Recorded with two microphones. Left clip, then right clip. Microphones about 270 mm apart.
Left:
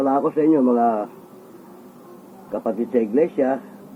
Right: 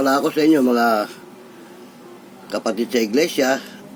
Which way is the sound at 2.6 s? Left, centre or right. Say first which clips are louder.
Right 1 dB; right.